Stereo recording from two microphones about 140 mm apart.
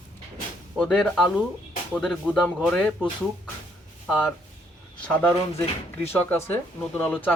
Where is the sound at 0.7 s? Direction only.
5° left (ahead or behind).